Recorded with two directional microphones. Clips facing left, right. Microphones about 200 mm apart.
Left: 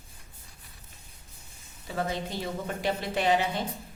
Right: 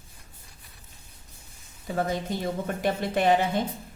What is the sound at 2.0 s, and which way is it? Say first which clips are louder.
A woman's voice: right 3 dB; 50° right (ahead or behind).